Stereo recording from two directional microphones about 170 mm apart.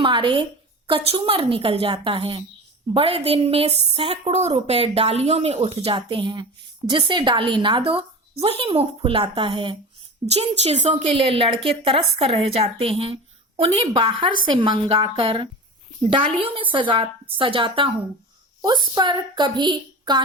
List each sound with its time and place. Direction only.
0.0 s a woman's voice: 30° right (ahead or behind); by 11.1 s 45° right (ahead or behind)
11.1 s a woman's voice: 35° right (ahead or behind)